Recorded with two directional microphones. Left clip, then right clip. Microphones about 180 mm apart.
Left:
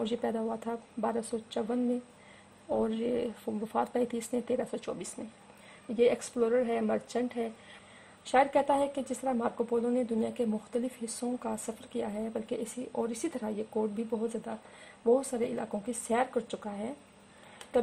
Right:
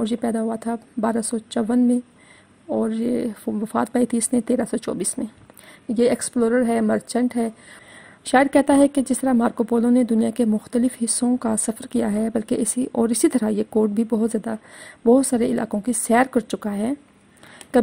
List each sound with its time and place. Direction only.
0.0 s a woman's voice: 15° right (ahead or behind)